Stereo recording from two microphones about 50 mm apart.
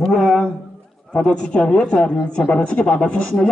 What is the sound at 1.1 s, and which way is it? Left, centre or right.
A man's voice, centre.